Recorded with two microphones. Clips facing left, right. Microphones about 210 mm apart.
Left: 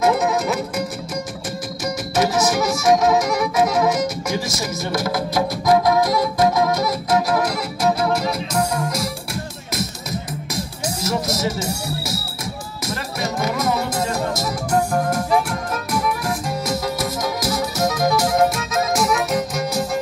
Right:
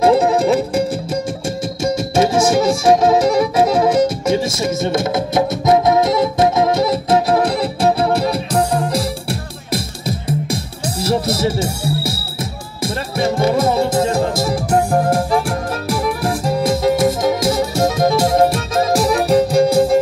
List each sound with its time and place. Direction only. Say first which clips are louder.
0.0 s music: right 6 dB; 30° right (ahead or behind)
1.9 s music: right 5 dB; 25° right (ahead or behind)